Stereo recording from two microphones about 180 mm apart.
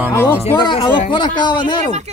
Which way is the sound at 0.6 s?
25° left (ahead or behind).